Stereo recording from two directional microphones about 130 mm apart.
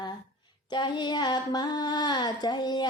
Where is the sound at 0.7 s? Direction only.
35° left (ahead or behind).